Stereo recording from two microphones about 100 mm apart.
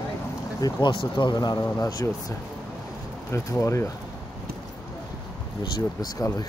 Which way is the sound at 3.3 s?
30° left (ahead or behind).